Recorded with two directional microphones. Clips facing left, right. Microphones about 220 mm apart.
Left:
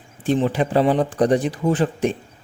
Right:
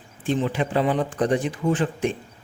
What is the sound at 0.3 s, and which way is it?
Speech, 40° left (ahead or behind).